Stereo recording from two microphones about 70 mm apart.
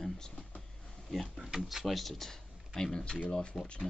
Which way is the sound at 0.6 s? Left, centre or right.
Centre.